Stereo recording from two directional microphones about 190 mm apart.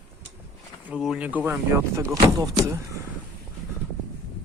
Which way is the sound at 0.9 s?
5° right (ahead or behind).